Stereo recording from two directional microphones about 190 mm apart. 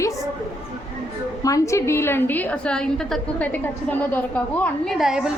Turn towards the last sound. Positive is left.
turn(degrees=-5)  # may be behind; listen again after turning